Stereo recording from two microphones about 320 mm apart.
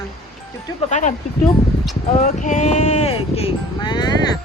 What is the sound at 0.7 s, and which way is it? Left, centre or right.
Music, left.